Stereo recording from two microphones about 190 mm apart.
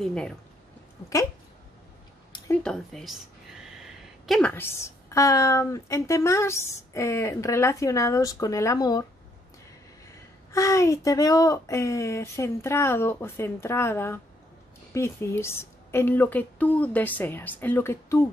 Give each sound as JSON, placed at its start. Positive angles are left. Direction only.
{"t": 0.0, "sound": "speech", "side_deg": 5}
{"t": 2.6, "sound": "a woman's voice", "side_deg": 0}
{"t": 10.5, "sound": "a woman's voice", "side_deg": 15}